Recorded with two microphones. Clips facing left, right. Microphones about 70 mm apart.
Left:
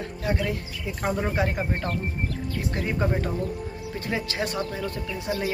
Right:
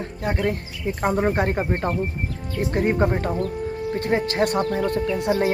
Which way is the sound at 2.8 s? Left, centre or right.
Right.